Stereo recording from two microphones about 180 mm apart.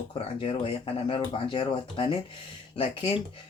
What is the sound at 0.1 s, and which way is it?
Speech, 30° left (ahead or behind).